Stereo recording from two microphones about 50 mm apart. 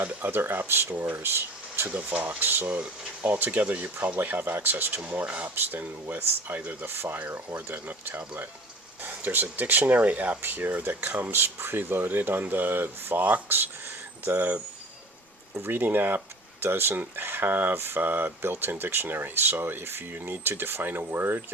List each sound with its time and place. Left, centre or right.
0.2 s speech: right
2.2 s speech: right
2.6 s speech: right
4.9 s speech: right
15.6 s speech: right